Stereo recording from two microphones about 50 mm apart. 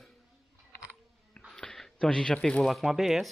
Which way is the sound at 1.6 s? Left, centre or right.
Centre.